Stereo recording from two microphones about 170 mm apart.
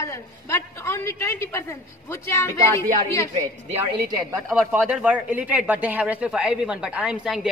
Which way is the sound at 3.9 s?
25° right (ahead or behind).